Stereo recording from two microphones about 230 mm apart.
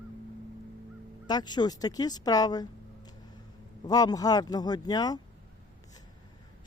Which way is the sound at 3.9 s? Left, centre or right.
Centre.